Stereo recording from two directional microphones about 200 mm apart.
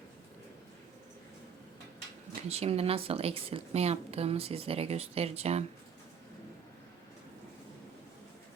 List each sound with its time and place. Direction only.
2.5 s a woman's voice: 30° right (ahead or behind)